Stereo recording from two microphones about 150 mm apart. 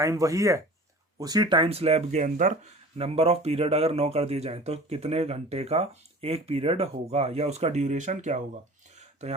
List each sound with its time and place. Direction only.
0.0 s speech: 20° right (ahead or behind); by 2.5 s 55° right (ahead or behind)
3.0 s speech: 40° right (ahead or behind)